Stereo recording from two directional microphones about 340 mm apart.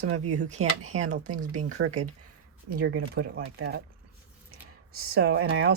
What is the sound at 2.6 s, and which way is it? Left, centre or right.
Speech, right.